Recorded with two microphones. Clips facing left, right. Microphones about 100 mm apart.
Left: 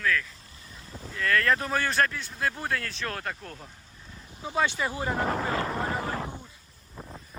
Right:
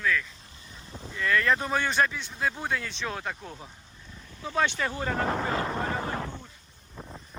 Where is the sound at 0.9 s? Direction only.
Centre (ahead or behind).